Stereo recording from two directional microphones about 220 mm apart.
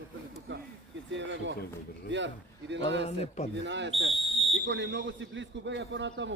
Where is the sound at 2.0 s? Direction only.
55° right (ahead or behind).